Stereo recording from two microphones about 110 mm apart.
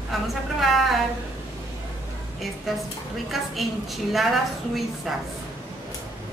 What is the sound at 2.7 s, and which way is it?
A woman's voice, centre (ahead or behind).